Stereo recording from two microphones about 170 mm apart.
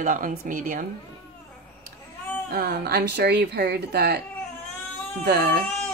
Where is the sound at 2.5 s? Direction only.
65° right (ahead or behind).